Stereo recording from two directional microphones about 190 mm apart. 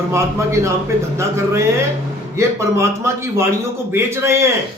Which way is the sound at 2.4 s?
15° right (ahead or behind).